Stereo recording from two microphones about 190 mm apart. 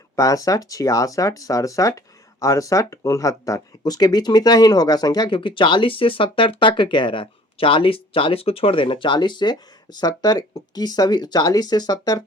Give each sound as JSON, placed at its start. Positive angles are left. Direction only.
{"t": 0.2, "sound": "speech", "side_deg": 15}